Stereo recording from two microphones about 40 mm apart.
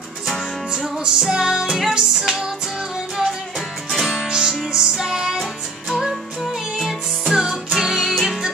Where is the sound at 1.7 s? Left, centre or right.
Centre.